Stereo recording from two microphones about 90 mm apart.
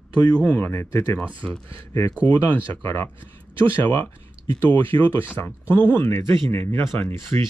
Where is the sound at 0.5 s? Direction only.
25° left (ahead or behind).